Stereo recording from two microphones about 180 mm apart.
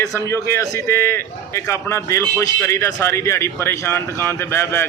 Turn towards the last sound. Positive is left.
turn(degrees=10)  # may be behind; listen again after turning